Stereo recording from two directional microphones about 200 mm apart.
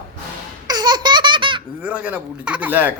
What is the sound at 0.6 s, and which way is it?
Baby laughter, 20° right (ahead or behind).